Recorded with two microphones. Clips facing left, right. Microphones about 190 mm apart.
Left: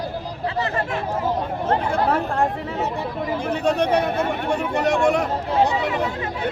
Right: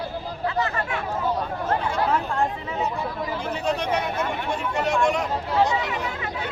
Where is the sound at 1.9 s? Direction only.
55° left (ahead or behind).